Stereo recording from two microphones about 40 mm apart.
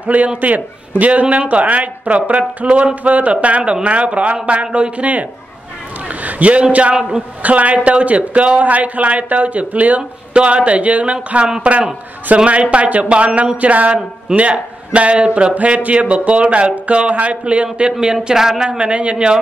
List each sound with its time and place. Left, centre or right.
0.0 s a man's voice: right
6.0 s a sound: right
7.0 s a man's voice: right
7.4 s a man's voice: right
18.0 s speech: centre
18.7 s a man's voice: right